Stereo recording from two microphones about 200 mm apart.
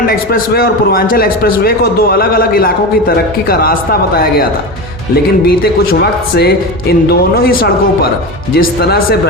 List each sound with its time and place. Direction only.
0.1 s a man's voice: 50° left (ahead or behind)